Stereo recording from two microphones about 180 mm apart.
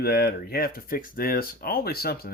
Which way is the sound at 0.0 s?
60° left (ahead or behind).